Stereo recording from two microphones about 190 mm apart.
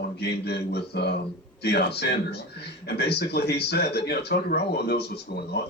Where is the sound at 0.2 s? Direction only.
60° left (ahead or behind).